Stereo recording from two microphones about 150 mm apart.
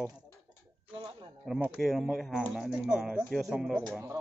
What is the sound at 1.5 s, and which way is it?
Speech, centre (ahead or behind).